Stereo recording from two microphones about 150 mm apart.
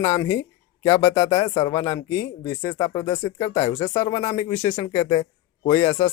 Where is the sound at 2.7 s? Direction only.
35° left (ahead or behind).